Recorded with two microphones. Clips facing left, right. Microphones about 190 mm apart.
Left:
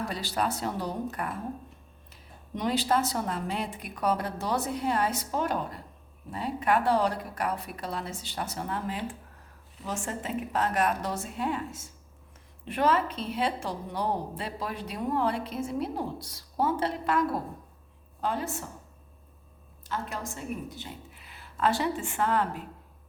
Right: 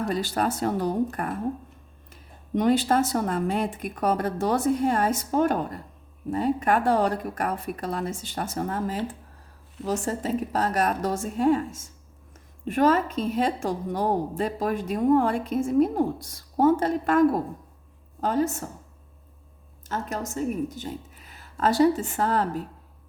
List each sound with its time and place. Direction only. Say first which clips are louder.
0.1 s a woman's voice: right 5 dB; 50° right (ahead or behind)
2.6 s a woman's voice: right 6 dB; 50° right (ahead or behind)
19.8 s a woman's voice: right 4 dB; 45° right (ahead or behind)